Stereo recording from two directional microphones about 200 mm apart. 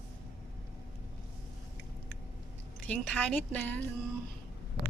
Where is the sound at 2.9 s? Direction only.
5° left (ahead or behind).